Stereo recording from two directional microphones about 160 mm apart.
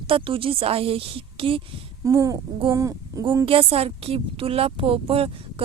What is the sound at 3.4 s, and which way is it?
Speech, 35° right (ahead or behind).